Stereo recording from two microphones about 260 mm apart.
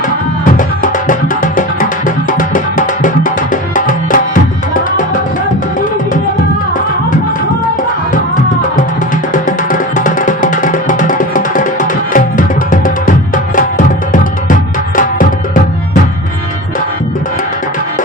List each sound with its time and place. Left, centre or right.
0.5 s music: left
9.3 s music: left